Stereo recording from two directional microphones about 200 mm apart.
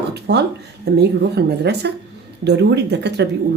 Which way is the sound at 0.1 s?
55° right (ahead or behind).